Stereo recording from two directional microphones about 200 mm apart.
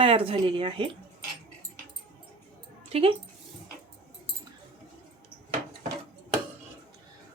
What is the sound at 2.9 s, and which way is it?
Speech, 30° right (ahead or behind).